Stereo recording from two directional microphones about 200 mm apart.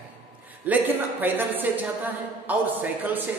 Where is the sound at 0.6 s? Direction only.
10° right (ahead or behind).